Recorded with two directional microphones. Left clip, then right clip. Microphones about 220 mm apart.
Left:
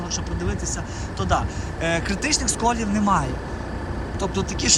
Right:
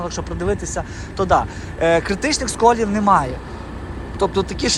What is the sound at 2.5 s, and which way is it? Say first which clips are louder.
Speech: right 7 dB; 15° left (ahead or behind).